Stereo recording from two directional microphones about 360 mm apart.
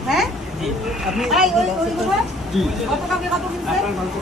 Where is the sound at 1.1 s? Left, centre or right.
Centre.